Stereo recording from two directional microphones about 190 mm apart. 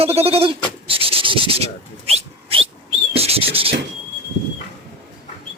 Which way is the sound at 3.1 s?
30° right (ahead or behind).